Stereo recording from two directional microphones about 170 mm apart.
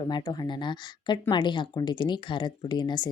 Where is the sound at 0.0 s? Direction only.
25° left (ahead or behind).